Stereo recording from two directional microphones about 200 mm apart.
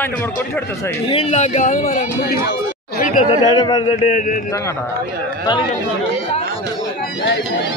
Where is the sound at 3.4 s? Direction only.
20° left (ahead or behind).